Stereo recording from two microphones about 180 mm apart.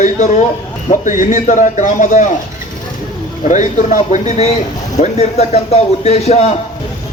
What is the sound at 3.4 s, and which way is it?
Speech, 45° left (ahead or behind).